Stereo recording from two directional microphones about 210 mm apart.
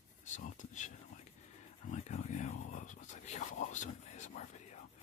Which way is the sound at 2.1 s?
35° left (ahead or behind).